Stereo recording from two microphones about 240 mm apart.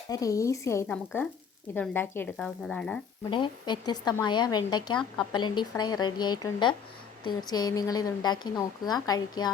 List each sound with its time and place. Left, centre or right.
0.1 s a woman's voice: centre
3.2 s a woman's voice: centre